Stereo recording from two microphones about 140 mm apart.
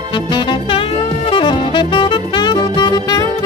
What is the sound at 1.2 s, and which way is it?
Saxophone, 35° left (ahead or behind).